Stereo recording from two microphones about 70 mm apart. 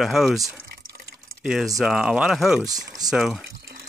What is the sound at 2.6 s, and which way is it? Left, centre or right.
Speech, right.